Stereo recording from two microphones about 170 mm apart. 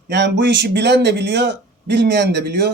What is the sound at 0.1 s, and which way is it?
A man's voice, 90° right.